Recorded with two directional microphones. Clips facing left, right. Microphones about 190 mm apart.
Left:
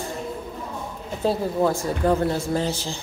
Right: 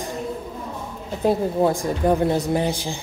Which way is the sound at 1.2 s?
20° right (ahead or behind).